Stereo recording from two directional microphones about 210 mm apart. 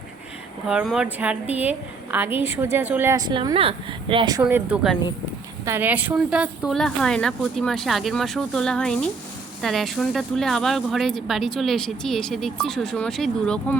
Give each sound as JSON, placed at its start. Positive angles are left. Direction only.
{"t": 0.7, "sound": "a woman's voice", "side_deg": -5}